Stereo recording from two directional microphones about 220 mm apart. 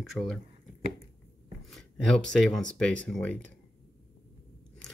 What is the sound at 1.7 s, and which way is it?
Speech, 5° left (ahead or behind).